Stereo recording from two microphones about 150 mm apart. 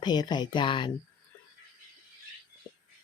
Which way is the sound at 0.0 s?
30° left (ahead or behind).